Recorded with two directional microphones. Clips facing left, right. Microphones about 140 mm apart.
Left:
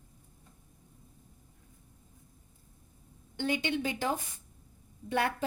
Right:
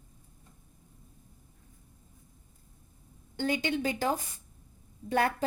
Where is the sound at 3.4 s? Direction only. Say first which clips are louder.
Right 2 dB; 40° right (ahead or behind).